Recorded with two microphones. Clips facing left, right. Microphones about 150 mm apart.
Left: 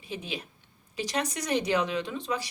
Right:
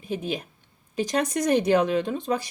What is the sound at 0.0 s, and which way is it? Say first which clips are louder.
Speech: right 7 dB; 50° right (ahead or behind).